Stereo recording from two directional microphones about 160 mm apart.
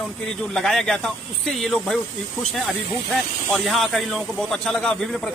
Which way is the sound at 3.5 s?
Centre (ahead or behind).